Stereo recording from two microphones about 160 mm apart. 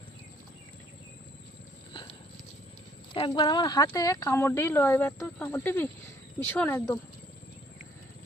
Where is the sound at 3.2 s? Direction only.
30° left (ahead or behind).